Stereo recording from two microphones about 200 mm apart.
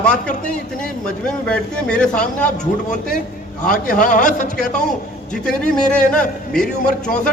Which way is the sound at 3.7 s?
40° left (ahead or behind).